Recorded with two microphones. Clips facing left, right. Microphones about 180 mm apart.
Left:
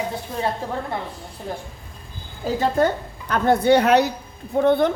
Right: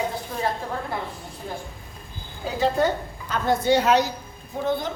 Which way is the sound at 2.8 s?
60° left (ahead or behind).